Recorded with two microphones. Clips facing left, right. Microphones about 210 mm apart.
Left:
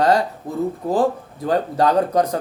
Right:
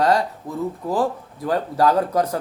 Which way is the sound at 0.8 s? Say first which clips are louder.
Left 3 dB; 25° left (ahead or behind).